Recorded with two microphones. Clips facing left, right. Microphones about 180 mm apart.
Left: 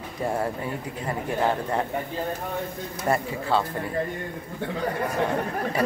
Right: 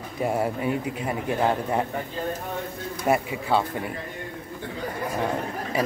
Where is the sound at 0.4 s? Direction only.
15° right (ahead or behind).